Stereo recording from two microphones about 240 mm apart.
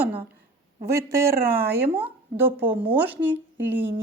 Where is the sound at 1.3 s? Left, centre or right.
Right.